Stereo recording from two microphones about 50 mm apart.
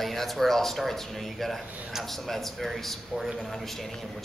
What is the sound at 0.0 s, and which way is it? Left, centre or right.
A man's voice, centre.